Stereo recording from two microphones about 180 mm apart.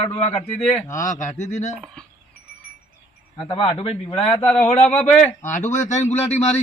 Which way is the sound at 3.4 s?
30° left (ahead or behind).